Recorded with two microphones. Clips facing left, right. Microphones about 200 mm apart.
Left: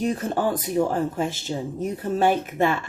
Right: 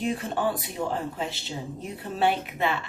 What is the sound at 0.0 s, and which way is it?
Speech, 40° left (ahead or behind).